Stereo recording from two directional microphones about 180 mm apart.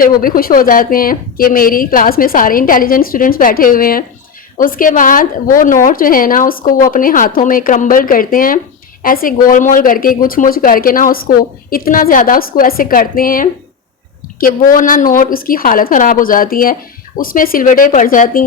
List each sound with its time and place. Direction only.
0.0 s a woman's voice: 50° left (ahead or behind)